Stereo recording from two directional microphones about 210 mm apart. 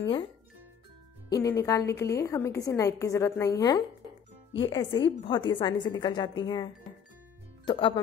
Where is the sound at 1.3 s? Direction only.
15° left (ahead or behind).